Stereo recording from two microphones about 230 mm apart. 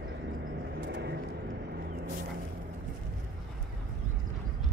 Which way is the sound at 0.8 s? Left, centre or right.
Right.